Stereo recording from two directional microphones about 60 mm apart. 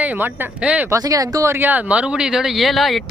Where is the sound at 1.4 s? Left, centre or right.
Right.